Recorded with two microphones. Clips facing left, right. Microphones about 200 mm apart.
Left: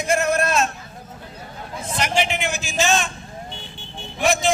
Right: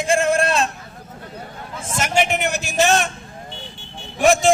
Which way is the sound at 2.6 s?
65° right (ahead or behind).